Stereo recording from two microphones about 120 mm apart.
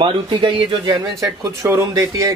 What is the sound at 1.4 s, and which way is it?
Speech, 25° right (ahead or behind).